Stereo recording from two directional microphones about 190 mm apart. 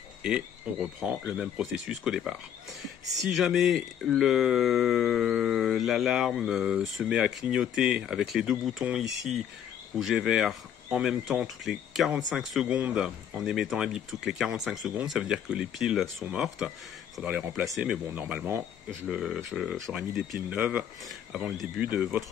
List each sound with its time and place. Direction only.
0.2 s speech: 5° right (ahead or behind)